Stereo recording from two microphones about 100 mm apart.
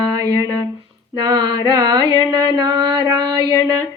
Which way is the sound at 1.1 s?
45° right (ahead or behind).